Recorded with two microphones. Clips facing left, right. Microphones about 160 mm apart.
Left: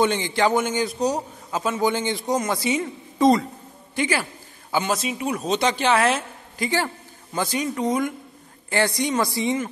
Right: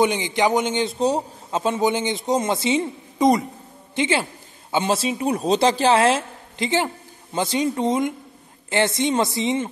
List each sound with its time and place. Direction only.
0.0 s a man's voice: 15° right (ahead or behind)